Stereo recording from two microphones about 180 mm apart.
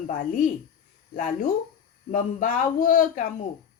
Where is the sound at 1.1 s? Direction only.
50° left (ahead or behind).